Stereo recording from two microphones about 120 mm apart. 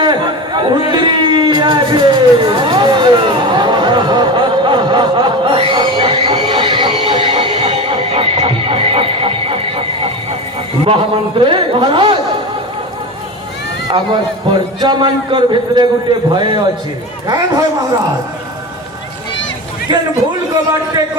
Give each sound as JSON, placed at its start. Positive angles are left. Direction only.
{"t": 0.0, "sound": "a sound", "side_deg": -40}
{"t": 7.6, "sound": "neigh", "side_deg": -55}
{"t": 10.8, "sound": "a man's voice", "side_deg": -45}
{"t": 14.8, "sound": "a man's voice", "side_deg": -40}
{"t": 19.9, "sound": "a man's voice", "side_deg": -40}